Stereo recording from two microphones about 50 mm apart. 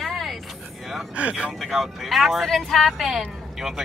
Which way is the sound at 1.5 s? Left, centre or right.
Centre.